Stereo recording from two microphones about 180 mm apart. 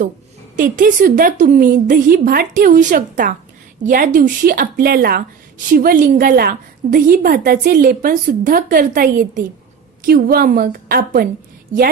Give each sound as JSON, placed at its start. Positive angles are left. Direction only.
{"t": 0.5, "sound": "a woman's voice", "side_deg": -50}